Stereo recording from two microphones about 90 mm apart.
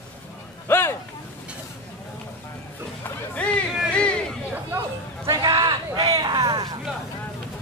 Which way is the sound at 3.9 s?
10° left (ahead or behind).